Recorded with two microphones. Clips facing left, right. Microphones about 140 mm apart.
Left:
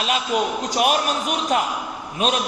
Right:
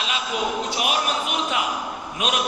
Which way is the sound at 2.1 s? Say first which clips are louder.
Left 4 dB; 35° left (ahead or behind).